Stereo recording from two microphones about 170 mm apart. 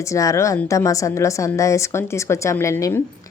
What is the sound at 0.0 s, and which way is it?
A woman's voice, 20° left (ahead or behind).